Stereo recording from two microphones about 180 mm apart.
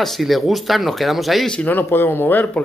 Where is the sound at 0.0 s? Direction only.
Centre (ahead or behind).